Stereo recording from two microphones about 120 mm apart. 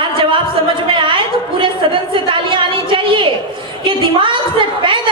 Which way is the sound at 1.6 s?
45° right (ahead or behind).